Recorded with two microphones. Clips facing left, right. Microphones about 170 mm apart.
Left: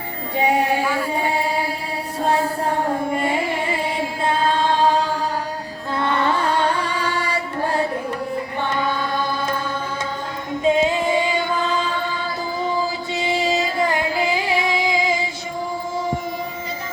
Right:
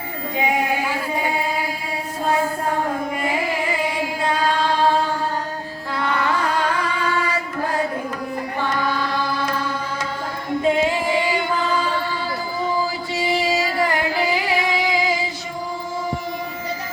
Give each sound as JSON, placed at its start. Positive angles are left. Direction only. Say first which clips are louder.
{"t": 0.3, "sound": "music", "louder": "left 3 dB", "side_deg": 35}
{"t": 3.2, "sound": "music", "louder": "left 1 dB", "side_deg": 30}
{"t": 6.0, "sound": "carnatic music", "louder": "left 1 dB", "side_deg": 30}
{"t": 8.7, "sound": "chant", "louder": "left 1 dB", "side_deg": 25}
{"t": 10.6, "sound": "female singing", "louder": "left 2 dB", "side_deg": 20}
{"t": 13.1, "sound": "music", "louder": "even", "side_deg": 20}